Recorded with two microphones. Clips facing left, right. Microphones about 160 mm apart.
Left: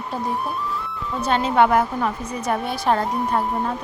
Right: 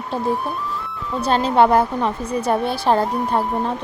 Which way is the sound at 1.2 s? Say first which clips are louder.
Right 2 dB; 30° right (ahead or behind).